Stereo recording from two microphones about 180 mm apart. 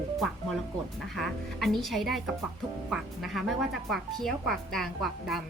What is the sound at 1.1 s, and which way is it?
A woman's voice, centre (ahead or behind).